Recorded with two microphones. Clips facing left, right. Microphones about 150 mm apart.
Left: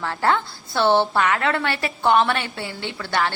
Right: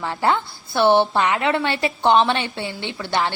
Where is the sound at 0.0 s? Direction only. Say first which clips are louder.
Right 1 dB; 15° right (ahead or behind).